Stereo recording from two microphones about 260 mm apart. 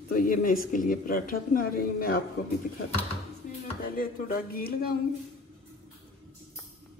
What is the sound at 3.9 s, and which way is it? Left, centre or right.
Speech, left.